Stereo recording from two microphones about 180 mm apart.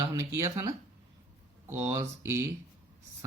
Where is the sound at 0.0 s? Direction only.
20° right (ahead or behind).